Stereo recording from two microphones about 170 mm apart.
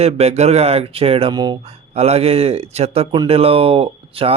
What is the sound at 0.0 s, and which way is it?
Speech, 40° right (ahead or behind).